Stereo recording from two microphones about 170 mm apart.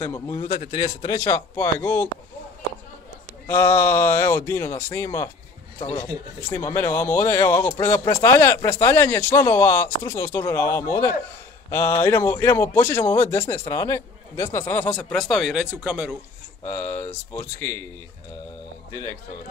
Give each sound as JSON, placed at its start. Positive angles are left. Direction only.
{"t": 0.0, "sound": "a man's voice", "side_deg": 20}
{"t": 3.4, "sound": "a man's voice", "side_deg": 15}
{"t": 6.5, "sound": "a man's voice", "side_deg": 15}
{"t": 16.6, "sound": "a man's voice", "side_deg": 10}